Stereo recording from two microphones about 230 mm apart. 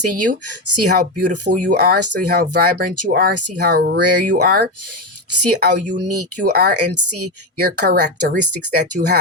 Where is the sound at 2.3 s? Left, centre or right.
Right.